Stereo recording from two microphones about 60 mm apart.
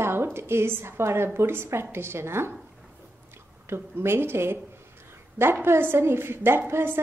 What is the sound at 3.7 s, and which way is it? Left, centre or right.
Speech, right.